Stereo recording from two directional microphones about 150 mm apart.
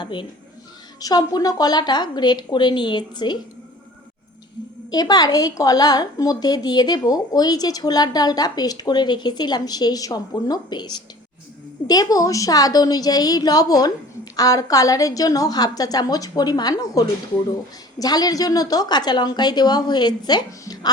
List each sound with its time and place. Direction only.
0.0 s a woman's voice: 30° left (ahead or behind)
4.9 s a woman's voice: 25° left (ahead or behind)